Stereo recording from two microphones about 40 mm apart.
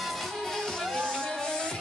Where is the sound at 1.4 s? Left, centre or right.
Centre.